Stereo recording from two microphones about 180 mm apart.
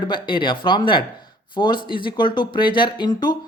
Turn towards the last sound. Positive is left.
turn(degrees=25)  # may be behind; listen again after turning